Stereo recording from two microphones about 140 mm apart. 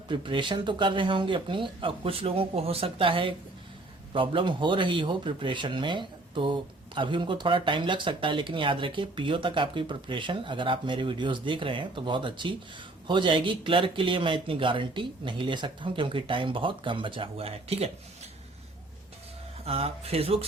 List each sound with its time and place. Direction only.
0.1 s a man's voice: 35° right (ahead or behind)
19.6 s speech: 45° right (ahead or behind)